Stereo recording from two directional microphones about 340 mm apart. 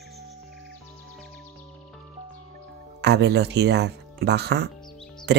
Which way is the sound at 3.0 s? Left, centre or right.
Right.